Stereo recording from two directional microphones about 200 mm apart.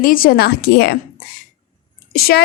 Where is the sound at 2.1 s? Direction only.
50° left (ahead or behind).